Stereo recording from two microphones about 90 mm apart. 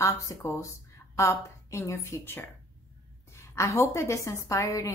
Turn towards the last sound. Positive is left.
turn(degrees=40)  # may be behind; listen again after turning